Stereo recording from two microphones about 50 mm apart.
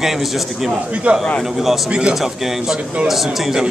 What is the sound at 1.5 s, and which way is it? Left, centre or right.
A man's voice, centre.